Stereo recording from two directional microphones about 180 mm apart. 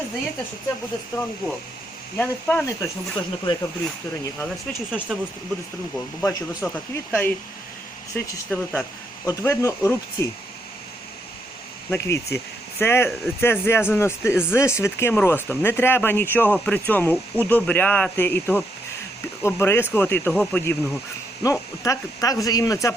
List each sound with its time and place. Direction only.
1.1 s speech: 10° left (ahead or behind)
6.2 s speech: 10° left (ahead or behind)
11.9 s speech: 15° left (ahead or behind)